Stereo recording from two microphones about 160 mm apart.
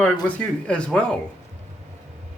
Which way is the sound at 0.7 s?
5° left (ahead or behind).